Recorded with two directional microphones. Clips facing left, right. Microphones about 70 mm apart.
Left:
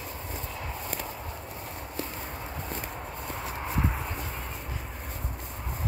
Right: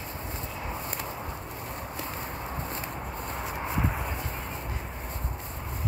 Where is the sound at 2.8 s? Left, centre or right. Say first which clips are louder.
Right 2 dB; centre.